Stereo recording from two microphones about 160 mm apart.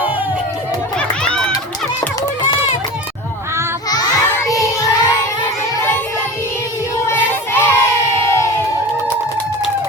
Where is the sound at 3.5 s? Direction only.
15° right (ahead or behind).